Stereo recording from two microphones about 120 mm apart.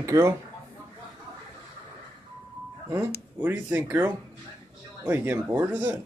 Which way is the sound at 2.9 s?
20° right (ahead or behind).